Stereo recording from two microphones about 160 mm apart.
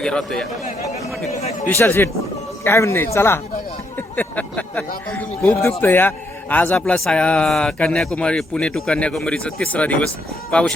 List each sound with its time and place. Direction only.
0.0 s speech: 5° left (ahead or behind)
0.6 s speech: 45° left (ahead or behind)
1.6 s a man's voice: 15° left (ahead or behind)